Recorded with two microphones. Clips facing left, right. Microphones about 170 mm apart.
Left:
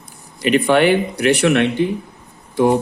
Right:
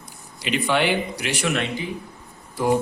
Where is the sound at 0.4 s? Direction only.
55° left (ahead or behind).